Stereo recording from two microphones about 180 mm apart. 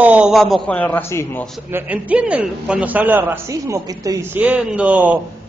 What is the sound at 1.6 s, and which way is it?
A man's voice, 10° right (ahead or behind).